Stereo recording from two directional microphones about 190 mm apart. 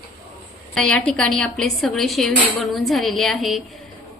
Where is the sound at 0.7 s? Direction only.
5° left (ahead or behind).